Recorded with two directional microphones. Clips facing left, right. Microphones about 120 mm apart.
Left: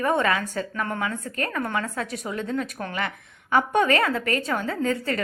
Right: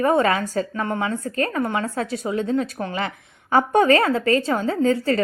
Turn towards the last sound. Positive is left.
turn(degrees=-30)  # may be behind; listen again after turning